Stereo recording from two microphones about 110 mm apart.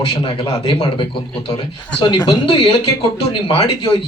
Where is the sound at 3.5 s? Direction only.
50° left (ahead or behind).